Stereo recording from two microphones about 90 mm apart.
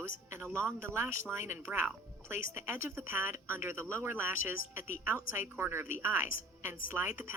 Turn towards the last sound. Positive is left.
turn(degrees=-20)  # may be behind; listen again after turning